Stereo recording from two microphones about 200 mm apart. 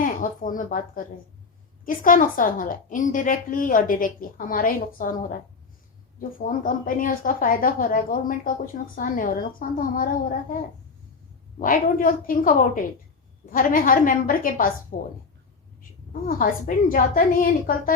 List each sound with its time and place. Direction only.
0.0 s a woman's voice: 40° left (ahead or behind)
11.6 s a woman's voice: 45° left (ahead or behind)
16.2 s a woman's voice: 45° left (ahead or behind)